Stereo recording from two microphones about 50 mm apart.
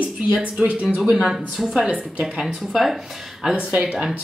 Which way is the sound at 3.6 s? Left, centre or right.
Right.